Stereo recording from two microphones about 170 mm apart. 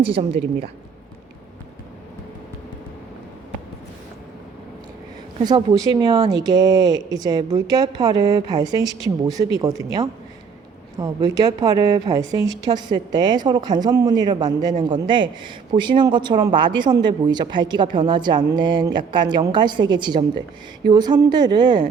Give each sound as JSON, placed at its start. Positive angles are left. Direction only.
{"t": 0.0, "sound": "a woman's voice", "side_deg": -35}
{"t": 5.4, "sound": "a woman's voice", "side_deg": -25}